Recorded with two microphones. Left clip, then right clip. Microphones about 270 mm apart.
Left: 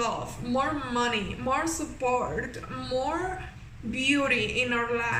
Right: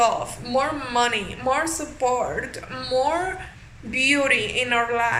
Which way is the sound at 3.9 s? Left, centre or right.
Centre.